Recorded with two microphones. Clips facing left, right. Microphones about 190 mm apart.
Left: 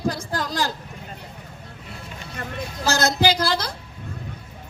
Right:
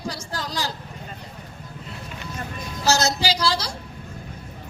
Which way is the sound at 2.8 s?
55° left (ahead or behind).